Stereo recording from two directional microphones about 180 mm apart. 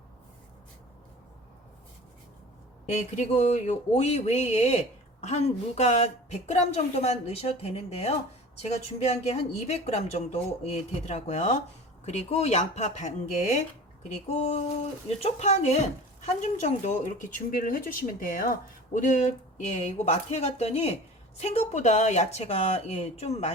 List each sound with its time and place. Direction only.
3.2 s speech: 40° left (ahead or behind)
15.2 s speech: 35° left (ahead or behind)